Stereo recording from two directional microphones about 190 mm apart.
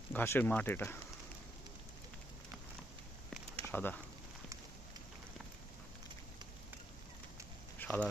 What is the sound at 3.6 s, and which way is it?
Speech, 10° left (ahead or behind).